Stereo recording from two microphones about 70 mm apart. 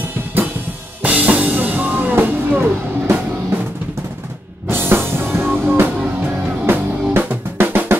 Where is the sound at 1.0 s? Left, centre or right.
Right.